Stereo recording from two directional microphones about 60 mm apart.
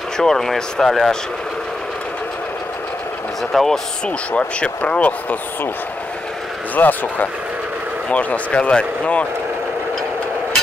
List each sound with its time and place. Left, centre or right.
0.2 s speech: centre
3.5 s speech: centre
4.3 s speech: centre
6.7 s speech: left